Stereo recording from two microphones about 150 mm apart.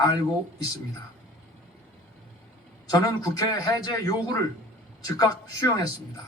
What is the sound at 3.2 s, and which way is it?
A man's voice, 25° left (ahead or behind).